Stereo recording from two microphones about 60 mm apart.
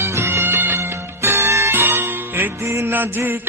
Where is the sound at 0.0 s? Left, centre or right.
Right.